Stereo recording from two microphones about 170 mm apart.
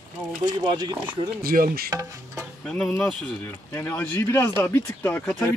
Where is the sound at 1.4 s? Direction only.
60° right (ahead or behind).